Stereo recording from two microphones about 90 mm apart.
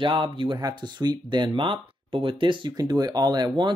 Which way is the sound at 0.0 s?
65° right (ahead or behind).